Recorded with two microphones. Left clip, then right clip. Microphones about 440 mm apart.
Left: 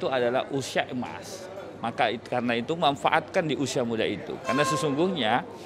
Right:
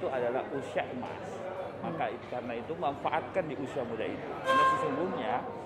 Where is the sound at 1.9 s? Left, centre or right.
Left.